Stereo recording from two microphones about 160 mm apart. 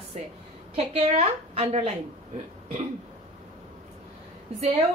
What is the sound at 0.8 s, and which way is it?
A woman's voice, 40° right (ahead or behind).